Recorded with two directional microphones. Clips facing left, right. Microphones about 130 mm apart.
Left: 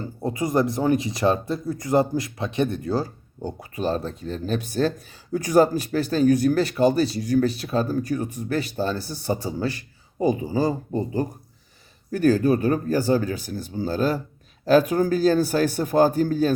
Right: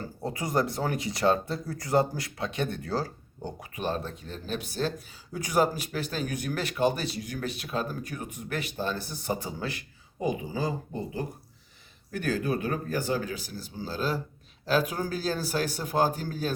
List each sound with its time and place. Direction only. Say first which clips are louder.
0.0 s speech: left 7 dB; 20° left (ahead or behind)
3.6 s speech: left 6 dB; 35° left (ahead or behind)